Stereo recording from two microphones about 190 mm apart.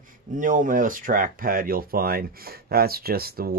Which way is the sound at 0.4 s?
45° right (ahead or behind).